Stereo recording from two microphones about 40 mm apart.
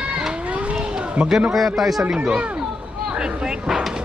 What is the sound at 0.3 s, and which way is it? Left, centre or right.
Children playing, right.